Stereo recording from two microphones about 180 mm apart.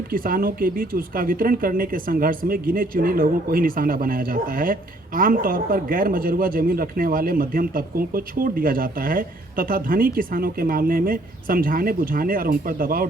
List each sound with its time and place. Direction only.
0.1 s speech: 50° right (ahead or behind)